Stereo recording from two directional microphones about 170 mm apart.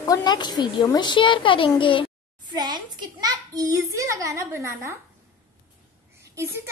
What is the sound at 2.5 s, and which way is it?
A child's voice, 25° right (ahead or behind).